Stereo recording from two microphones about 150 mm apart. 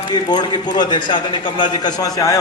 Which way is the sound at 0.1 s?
30° left (ahead or behind).